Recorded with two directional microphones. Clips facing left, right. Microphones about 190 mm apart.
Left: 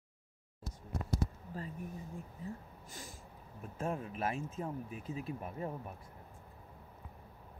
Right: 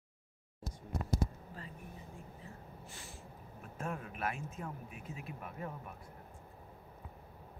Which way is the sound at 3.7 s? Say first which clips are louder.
Left 3 dB; 30° left (ahead or behind).